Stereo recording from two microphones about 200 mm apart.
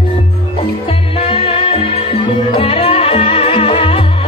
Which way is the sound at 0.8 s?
30° left (ahead or behind).